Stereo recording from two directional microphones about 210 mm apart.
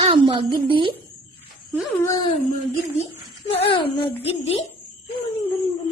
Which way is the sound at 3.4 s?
30° left (ahead or behind).